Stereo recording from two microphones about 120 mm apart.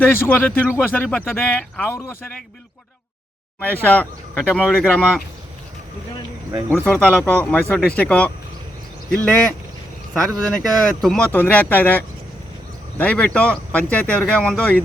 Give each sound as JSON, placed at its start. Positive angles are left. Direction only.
{"t": 0.0, "sound": "speech", "side_deg": 15}
{"t": 3.6, "sound": "speech", "side_deg": 15}
{"t": 6.7, "sound": "speech", "side_deg": 15}
{"t": 11.3, "sound": "speech", "side_deg": 15}